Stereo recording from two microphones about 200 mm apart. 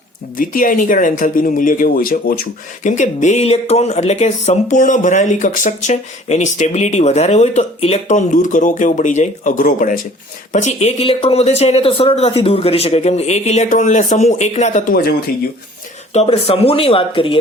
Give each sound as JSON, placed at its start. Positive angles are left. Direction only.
{"t": 0.3, "sound": "speech", "side_deg": 40}
{"t": 16.1, "sound": "speech", "side_deg": 30}